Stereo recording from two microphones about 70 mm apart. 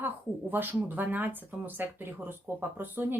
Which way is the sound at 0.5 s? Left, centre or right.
Right.